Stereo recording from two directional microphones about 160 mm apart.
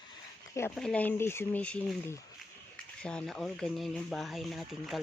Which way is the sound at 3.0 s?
5° left (ahead or behind).